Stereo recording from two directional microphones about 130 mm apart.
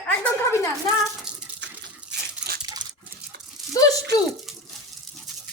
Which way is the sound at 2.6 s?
30° right (ahead or behind).